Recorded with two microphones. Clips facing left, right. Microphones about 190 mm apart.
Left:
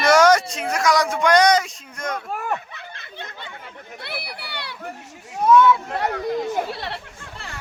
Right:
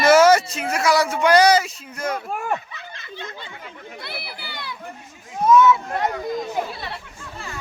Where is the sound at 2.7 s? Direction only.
55° left (ahead or behind).